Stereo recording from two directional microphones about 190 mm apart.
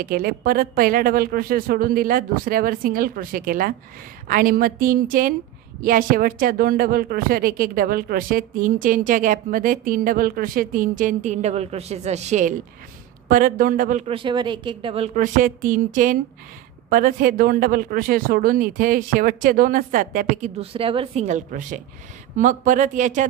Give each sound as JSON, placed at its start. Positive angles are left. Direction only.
{"t": 0.0, "sound": "speech", "side_deg": -50}
{"t": 15.1, "sound": "speech", "side_deg": -45}